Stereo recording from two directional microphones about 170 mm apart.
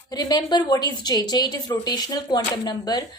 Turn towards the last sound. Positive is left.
turn(degrees=25)  # may be behind; listen again after turning